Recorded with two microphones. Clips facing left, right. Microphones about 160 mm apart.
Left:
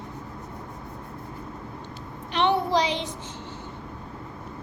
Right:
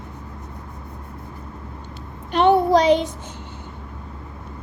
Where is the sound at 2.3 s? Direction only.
45° right (ahead or behind).